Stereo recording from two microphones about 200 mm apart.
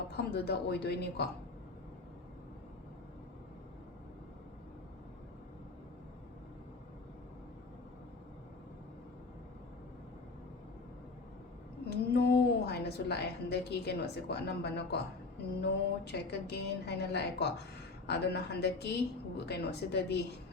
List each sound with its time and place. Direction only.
0.1 s a woman's voice: 55° left (ahead or behind)
11.9 s a woman's voice: 55° left (ahead or behind)